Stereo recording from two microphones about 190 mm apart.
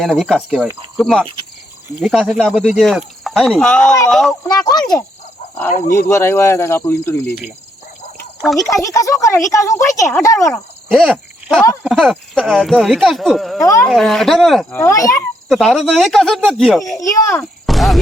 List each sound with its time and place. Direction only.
0.0 s speech: centre (ahead or behind)
4.4 s speech: 20° left (ahead or behind)
6.1 s speech: 15° left (ahead or behind)
8.4 s speech: centre (ahead or behind)
8.7 s speech: 15° left (ahead or behind)
10.8 s a sound: 5° right (ahead or behind)
11.8 s speech: centre (ahead or behind)
13.6 s speech: 15° left (ahead or behind)
13.9 s speech: centre (ahead or behind)
14.7 s speech: 15° left (ahead or behind)
15.4 s speech: centre (ahead or behind)